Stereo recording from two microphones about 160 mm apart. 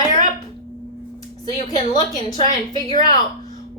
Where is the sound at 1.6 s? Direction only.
25° left (ahead or behind).